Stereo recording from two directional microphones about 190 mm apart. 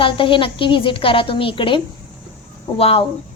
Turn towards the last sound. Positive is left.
turn(degrees=30)  # may be behind; listen again after turning